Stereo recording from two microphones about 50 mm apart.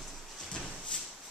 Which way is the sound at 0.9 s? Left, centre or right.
Centre.